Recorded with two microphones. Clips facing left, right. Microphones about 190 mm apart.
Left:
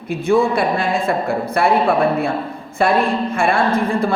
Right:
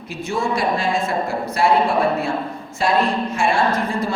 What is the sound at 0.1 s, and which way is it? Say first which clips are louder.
A woman's voice: left 7 dB; 55° left (ahead or behind).